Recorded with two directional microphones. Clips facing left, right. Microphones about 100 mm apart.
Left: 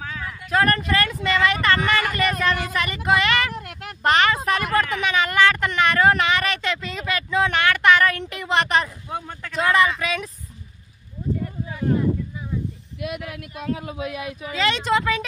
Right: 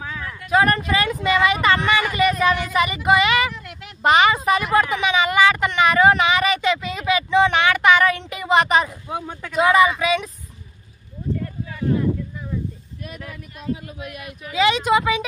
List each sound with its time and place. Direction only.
0.0 s speech: 5° right (ahead or behind)
3.5 s a sound: 50° left (ahead or behind)
4.0 s speech: 5° right (ahead or behind)
13.0 s speech: 85° left
14.5 s speech: 5° right (ahead or behind)